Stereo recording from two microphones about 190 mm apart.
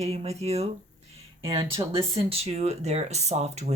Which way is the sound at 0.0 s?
35° right (ahead or behind).